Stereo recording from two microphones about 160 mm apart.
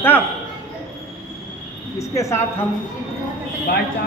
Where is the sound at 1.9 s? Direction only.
20° left (ahead or behind).